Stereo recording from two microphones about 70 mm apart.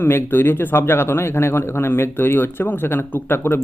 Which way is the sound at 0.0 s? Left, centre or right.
Left.